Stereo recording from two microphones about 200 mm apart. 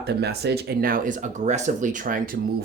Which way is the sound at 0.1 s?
55° right (ahead or behind).